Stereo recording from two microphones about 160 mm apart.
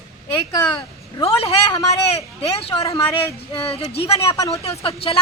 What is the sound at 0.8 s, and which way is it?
A man's voice, 35° left (ahead or behind).